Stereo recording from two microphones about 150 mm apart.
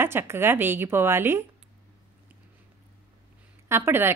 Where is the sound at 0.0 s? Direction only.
15° right (ahead or behind).